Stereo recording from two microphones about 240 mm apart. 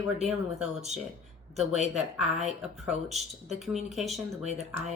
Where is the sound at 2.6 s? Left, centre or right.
Centre.